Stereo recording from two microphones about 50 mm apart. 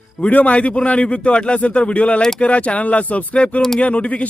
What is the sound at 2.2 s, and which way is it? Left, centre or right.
Speech, centre.